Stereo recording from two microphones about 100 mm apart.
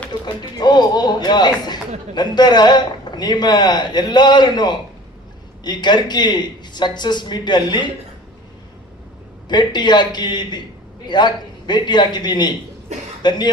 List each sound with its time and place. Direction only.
0.3 s speech: 45° left (ahead or behind)
9.5 s speech: 50° left (ahead or behind)